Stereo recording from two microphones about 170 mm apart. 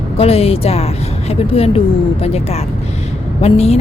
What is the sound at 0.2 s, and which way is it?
A woman's voice, 35° left (ahead or behind).